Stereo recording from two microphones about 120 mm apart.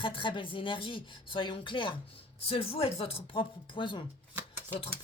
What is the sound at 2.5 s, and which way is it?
Speech, 55° left (ahead or behind).